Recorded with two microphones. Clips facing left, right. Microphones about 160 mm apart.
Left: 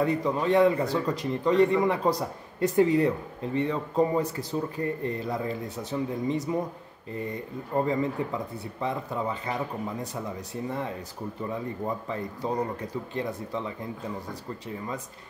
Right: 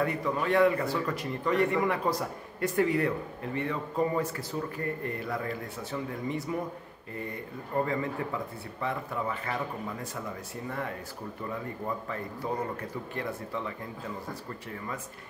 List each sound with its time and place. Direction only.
0.0 s speech: 20° left (ahead or behind)
7.7 s speech: 25° left (ahead or behind)